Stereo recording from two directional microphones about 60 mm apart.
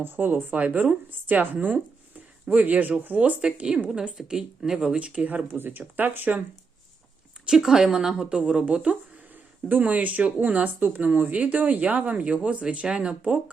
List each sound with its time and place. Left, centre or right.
0.0 s speech: right; by 4.9 s centre
4.9 s speech: centre
5.5 s speech: right
7.4 s speech: centre